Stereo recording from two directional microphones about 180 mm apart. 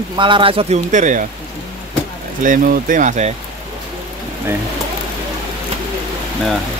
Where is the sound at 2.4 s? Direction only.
50° right (ahead or behind).